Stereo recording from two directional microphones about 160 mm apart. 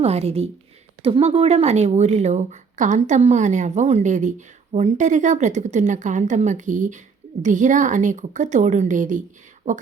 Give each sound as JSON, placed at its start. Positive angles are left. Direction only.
{"t": 0.0, "sound": "a woman's voice", "side_deg": -40}